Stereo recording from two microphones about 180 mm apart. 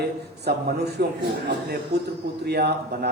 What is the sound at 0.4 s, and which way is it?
A man's voice, 65° right (ahead or behind).